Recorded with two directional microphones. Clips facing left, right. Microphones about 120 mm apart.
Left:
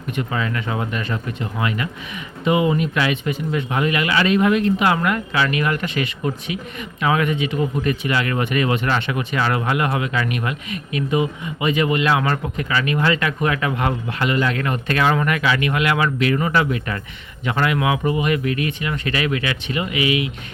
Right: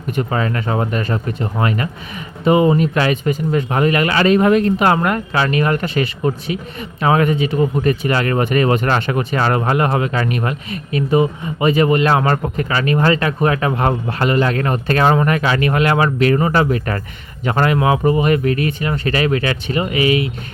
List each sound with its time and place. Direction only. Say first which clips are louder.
0.2 s speech: right 5 dB; 40° right (ahead or behind)